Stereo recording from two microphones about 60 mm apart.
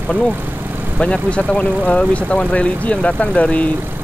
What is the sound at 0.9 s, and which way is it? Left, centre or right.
Speech, centre.